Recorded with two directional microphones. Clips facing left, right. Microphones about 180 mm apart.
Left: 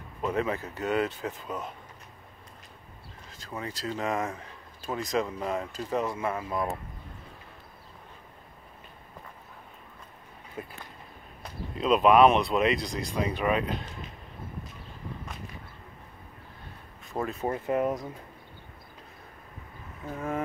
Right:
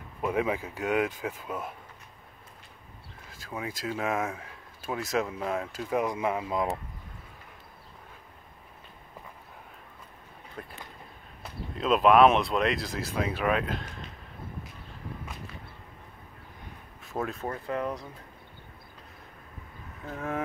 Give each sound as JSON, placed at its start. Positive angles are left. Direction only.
{"t": 0.2, "sound": "speech", "side_deg": -10}
{"t": 3.3, "sound": "speech", "side_deg": -10}
{"t": 10.6, "sound": "speech", "side_deg": 10}
{"t": 17.0, "sound": "a sound", "side_deg": 0}
{"t": 17.5, "sound": "speech", "side_deg": 20}
{"t": 20.1, "sound": "speech", "side_deg": 0}